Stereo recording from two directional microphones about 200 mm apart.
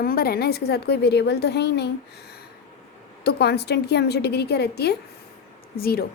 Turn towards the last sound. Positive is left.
turn(degrees=50)  # may be behind; listen again after turning